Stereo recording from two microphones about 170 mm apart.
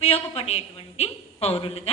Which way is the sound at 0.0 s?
35° left (ahead or behind).